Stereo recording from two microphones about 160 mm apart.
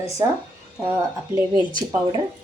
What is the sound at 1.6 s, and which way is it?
Speech, 30° left (ahead or behind).